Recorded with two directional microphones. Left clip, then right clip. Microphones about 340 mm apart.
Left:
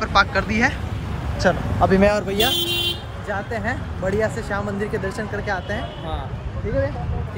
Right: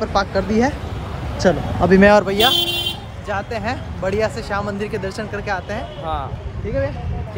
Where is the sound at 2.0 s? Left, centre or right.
Right.